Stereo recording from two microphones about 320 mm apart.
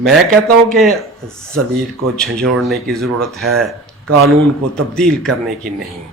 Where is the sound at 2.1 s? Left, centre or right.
Centre.